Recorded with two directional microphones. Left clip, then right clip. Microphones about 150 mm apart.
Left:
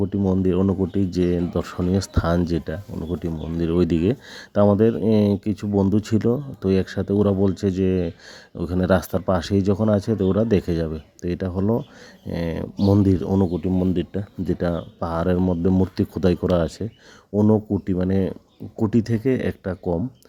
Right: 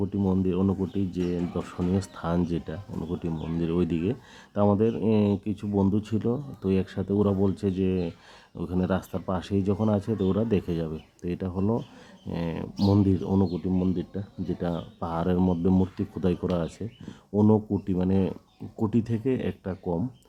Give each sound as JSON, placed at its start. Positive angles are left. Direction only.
{"t": 0.3, "sound": "speech", "side_deg": 30}
{"t": 14.0, "sound": "speech", "side_deg": 40}
{"t": 15.4, "sound": "speech", "side_deg": 15}
{"t": 15.8, "sound": "speech", "side_deg": 30}
{"t": 17.4, "sound": "speech", "side_deg": 20}